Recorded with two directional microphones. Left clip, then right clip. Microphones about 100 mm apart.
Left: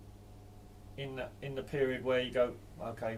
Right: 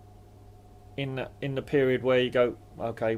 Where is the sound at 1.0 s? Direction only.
35° right (ahead or behind).